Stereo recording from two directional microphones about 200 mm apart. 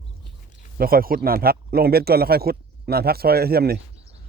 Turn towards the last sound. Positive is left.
turn(degrees=-50)  # may be behind; listen again after turning